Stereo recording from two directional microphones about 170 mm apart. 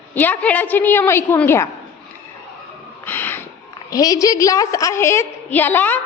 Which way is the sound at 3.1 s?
10° left (ahead or behind).